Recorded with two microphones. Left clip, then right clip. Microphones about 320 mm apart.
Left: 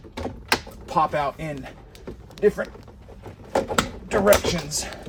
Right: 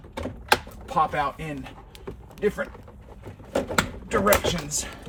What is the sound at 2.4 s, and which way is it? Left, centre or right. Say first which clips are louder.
Speech: left 5 dB; left.